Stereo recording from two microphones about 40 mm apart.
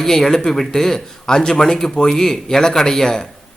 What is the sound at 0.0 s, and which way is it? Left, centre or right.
A man's voice, centre.